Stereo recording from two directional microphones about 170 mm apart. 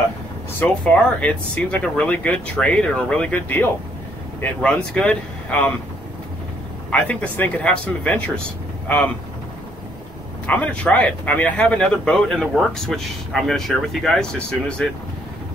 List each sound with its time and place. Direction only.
0.6 s speech: 5° left (ahead or behind)
6.9 s speech: 10° left (ahead or behind)
10.4 s speech: 10° left (ahead or behind)